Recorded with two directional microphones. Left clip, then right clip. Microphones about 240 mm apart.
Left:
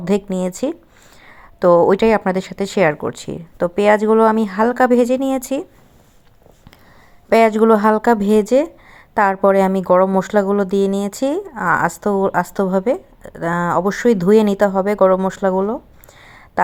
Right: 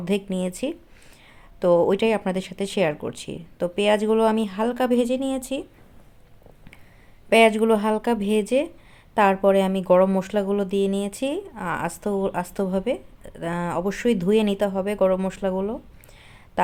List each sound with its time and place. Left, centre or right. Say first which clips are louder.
0.0 s speech: left 7 dB; centre
7.3 s speech: left 5 dB; centre